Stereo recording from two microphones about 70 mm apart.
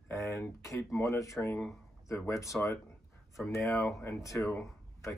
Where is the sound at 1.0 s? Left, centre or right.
Left.